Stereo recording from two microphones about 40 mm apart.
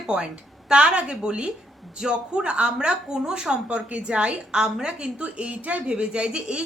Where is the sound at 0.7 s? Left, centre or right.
Right.